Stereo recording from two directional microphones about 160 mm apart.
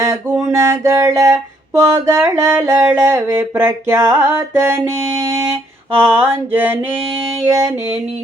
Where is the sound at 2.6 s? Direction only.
20° right (ahead or behind).